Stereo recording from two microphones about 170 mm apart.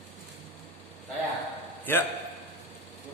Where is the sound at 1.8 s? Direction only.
15° left (ahead or behind).